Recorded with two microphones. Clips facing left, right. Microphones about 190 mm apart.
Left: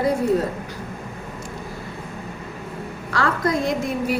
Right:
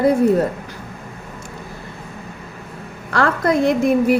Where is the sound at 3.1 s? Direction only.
55° right (ahead or behind).